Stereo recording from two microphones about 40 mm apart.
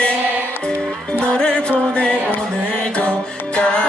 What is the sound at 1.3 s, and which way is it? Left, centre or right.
Music, left.